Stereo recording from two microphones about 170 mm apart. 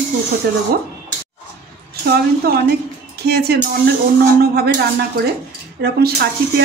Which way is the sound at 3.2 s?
70° right (ahead or behind).